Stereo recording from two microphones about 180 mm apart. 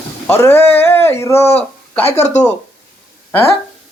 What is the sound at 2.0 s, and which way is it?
Speech, 40° left (ahead or behind).